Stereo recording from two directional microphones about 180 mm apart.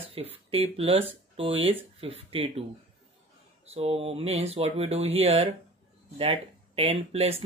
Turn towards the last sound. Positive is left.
turn(degrees=-35)  # may be behind; listen again after turning